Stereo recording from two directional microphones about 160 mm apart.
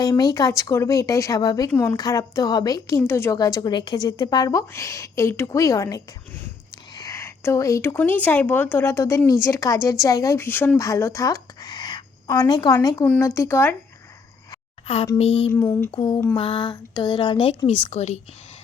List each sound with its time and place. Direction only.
0.0 s a woman's voice: 25° left (ahead or behind)
14.9 s speech: 35° left (ahead or behind)
15.5 s speech: 15° left (ahead or behind)
15.9 s speech: 30° left (ahead or behind)